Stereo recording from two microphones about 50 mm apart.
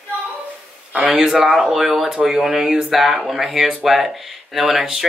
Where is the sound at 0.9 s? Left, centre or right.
Centre.